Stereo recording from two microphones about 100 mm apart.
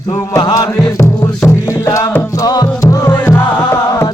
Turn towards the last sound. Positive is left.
turn(degrees=30)  # may be behind; listen again after turning